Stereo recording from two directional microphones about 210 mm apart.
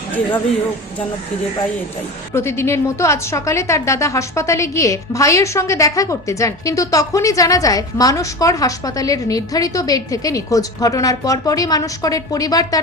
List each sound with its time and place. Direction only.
2.3 s a woman's voice: 10° left (ahead or behind)